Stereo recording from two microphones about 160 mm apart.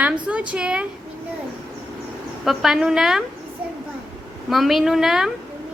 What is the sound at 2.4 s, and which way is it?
Speech, centre (ahead or behind).